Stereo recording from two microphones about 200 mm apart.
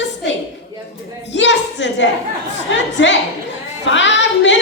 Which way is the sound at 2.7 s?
65° left (ahead or behind).